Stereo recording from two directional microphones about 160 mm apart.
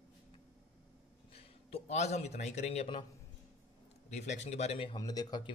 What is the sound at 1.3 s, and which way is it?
A man's voice, 40° left (ahead or behind).